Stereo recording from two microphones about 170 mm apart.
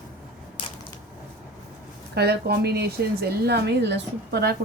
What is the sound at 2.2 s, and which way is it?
A woman's voice, 70° right (ahead or behind).